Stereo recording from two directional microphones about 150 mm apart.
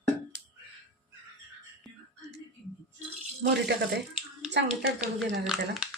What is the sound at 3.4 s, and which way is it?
Speech, 90° right.